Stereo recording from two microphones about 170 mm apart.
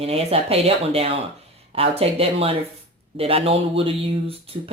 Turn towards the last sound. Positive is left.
turn(degrees=-35)  # may be behind; listen again after turning